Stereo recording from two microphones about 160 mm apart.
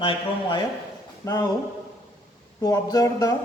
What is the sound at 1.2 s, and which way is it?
Speech, 20° left (ahead or behind).